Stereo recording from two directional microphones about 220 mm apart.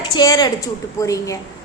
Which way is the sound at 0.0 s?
20° left (ahead or behind).